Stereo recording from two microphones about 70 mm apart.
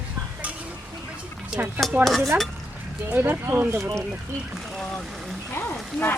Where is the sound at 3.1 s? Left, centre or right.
Right.